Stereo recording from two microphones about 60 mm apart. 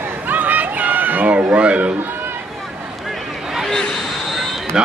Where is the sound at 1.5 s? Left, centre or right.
Right.